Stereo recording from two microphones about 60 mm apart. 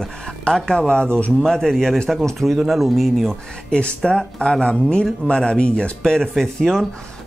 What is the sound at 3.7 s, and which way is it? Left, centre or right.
A man's voice, centre.